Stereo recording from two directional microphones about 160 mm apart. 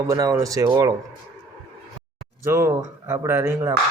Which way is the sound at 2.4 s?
15° right (ahead or behind).